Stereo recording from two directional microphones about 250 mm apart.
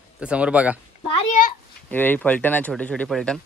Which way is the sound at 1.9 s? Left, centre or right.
Centre.